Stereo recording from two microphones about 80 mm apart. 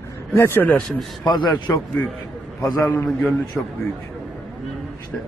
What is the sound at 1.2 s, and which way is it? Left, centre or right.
Speech, left.